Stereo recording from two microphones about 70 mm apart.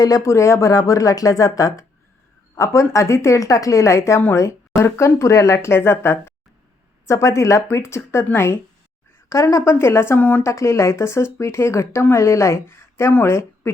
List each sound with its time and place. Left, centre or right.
0.0 s speech: left
2.6 s speech: left
7.1 s speech: left
9.3 s speech: left
9.6 s speech: left
10.2 s speech: left
10.4 s speech: left